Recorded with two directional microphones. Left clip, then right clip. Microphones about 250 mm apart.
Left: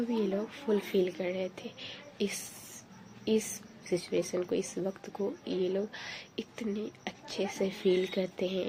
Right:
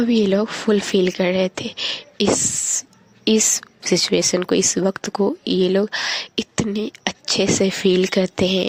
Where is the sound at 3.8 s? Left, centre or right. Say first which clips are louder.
Right 14 dB; right.